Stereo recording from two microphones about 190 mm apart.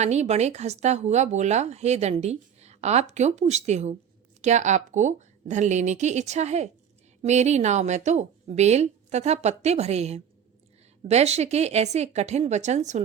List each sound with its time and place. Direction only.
0.0 s speech: 35° right (ahead or behind)